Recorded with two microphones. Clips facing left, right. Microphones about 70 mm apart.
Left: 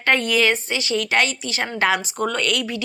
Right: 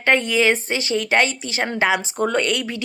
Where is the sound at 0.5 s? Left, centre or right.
Right.